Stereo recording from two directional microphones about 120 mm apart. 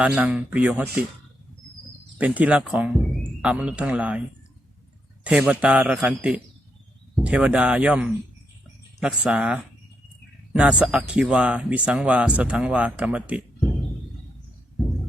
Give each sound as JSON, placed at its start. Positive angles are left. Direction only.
{"t": 0.0, "sound": "speech", "side_deg": -10}
{"t": 2.1, "sound": "speech", "side_deg": -10}
{"t": 5.2, "sound": "speech", "side_deg": -10}